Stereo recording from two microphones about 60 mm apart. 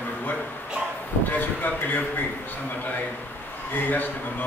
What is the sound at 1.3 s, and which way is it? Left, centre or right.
Vehicle, left.